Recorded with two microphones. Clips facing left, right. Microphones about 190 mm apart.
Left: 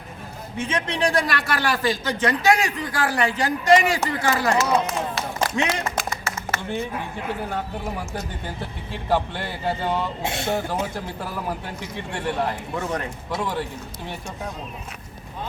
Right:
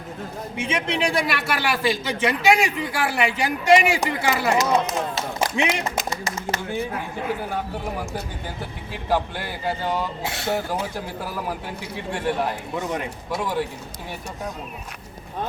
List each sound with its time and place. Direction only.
0.5 s a man's voice: 10° right (ahead or behind)
8.9 s a man's voice: 5° right (ahead or behind)
10.2 s speech: 25° left (ahead or behind)
12.7 s a man's voice: 15° right (ahead or behind)
13.3 s a man's voice: 5° right (ahead or behind)